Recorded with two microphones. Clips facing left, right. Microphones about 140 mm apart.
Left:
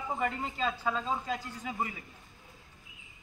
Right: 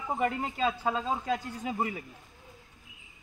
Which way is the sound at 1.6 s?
50° right (ahead or behind).